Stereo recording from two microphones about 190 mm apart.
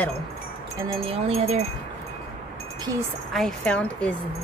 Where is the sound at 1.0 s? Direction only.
30° right (ahead or behind).